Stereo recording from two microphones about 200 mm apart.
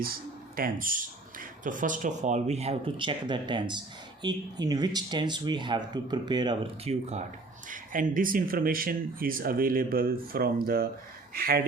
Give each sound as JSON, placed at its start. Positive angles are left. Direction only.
{"t": 0.5, "sound": "speech", "side_deg": -45}
{"t": 7.7, "sound": "speech", "side_deg": -45}